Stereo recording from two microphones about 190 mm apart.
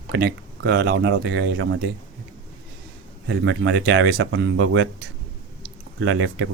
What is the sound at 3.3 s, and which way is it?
Speech, 70° right (ahead or behind).